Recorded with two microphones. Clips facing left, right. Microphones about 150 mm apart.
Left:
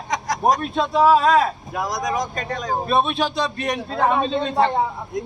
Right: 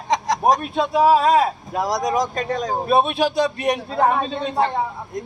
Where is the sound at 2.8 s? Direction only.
10° right (ahead or behind).